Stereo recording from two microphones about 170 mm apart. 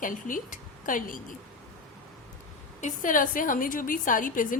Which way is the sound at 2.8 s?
50° left (ahead or behind).